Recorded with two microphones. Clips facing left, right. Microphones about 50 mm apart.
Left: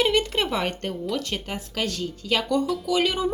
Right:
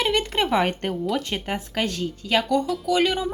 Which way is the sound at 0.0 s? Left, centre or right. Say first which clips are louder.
Even; centre.